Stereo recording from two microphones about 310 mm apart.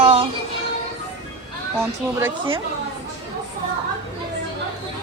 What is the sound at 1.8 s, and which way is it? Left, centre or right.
Speech, centre.